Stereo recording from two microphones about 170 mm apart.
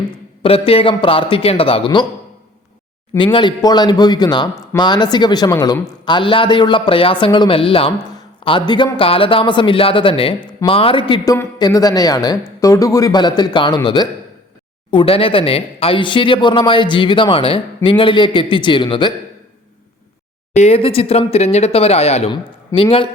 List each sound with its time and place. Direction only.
0.4 s a man's voice: 35° left (ahead or behind)
3.3 s a man's voice: 25° left (ahead or behind)
20.5 s a man's voice: 40° left (ahead or behind)